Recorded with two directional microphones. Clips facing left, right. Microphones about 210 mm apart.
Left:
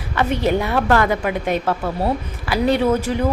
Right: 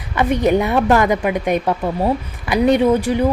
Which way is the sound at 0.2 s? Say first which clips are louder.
Right 3 dB; 15° right (ahead or behind).